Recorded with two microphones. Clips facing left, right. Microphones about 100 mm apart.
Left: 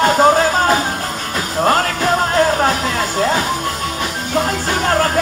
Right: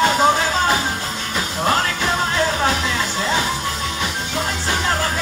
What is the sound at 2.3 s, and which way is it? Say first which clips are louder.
Music: left 5 dB; 45° left (ahead or behind).